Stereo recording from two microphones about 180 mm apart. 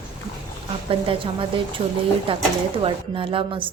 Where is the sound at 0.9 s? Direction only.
30° right (ahead or behind).